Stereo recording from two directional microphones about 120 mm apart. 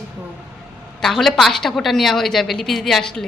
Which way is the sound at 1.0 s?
Centre (ahead or behind).